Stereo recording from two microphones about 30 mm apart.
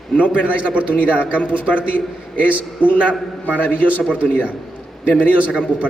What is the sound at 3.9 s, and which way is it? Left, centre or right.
Speech, right.